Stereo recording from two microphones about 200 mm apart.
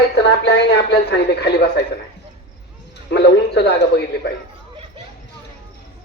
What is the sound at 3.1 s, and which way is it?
A man's voice, 55° left (ahead or behind).